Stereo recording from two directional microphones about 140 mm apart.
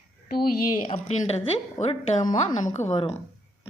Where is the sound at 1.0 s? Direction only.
50° left (ahead or behind).